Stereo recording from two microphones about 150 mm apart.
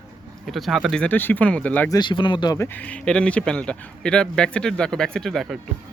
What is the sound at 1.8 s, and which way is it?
Speech, 30° left (ahead or behind).